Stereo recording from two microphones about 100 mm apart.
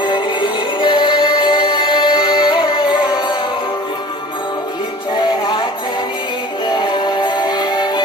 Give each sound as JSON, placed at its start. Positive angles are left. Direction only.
{"t": 0.0, "sound": "music", "side_deg": 55}
{"t": 5.1, "sound": "music", "side_deg": 50}
{"t": 6.7, "sound": "music", "side_deg": 50}